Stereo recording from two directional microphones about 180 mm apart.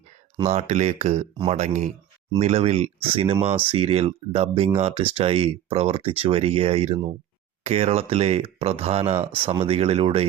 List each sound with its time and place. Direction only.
0.3 s speech: 35° right (ahead or behind)